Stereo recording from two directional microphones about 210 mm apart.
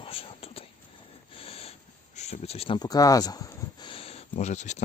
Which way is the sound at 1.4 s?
25° left (ahead or behind).